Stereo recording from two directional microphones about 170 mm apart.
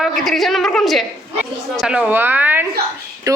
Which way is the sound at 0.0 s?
Centre (ahead or behind).